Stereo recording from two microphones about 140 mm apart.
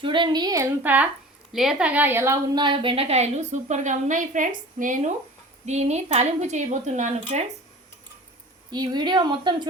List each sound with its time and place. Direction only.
0.0 s speech: 35° right (ahead or behind)
0.8 s a woman's voice: 10° right (ahead or behind)
2.6 s a woman's voice: 35° right (ahead or behind); by 5.1 s 70° right (ahead or behind)
5.6 s speech: 55° right (ahead or behind)
8.7 s speech: 30° right (ahead or behind)